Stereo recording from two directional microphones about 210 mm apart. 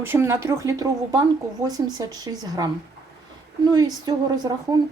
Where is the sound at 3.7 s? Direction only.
20° right (ahead or behind).